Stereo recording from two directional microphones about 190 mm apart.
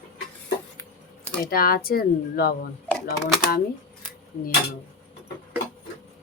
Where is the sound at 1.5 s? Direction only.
50° left (ahead or behind).